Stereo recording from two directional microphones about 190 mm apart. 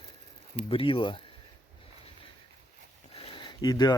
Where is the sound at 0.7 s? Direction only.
30° left (ahead or behind).